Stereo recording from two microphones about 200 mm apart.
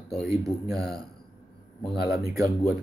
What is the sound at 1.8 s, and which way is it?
Speech, centre (ahead or behind).